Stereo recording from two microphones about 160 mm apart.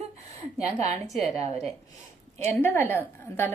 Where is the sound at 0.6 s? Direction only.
40° right (ahead or behind).